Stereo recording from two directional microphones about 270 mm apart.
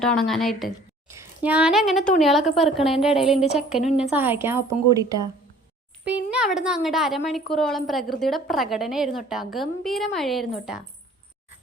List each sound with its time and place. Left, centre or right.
0.0 s a woman's voice: centre
6.3 s a woman's voice: centre